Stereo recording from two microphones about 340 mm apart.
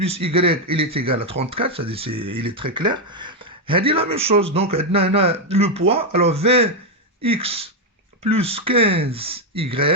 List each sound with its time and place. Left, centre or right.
0.0 s speech: centre